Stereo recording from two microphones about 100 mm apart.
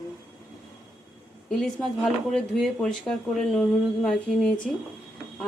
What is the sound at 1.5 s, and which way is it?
Speech, 5° left (ahead or behind).